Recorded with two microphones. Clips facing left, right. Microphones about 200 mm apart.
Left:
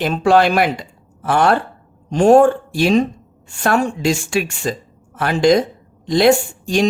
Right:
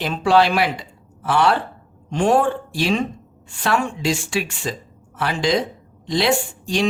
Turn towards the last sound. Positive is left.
turn(degrees=45)  # may be behind; listen again after turning